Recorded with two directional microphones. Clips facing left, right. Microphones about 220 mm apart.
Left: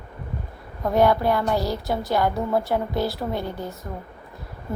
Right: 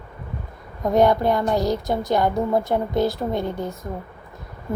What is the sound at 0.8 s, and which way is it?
A woman's voice, 20° right (ahead or behind).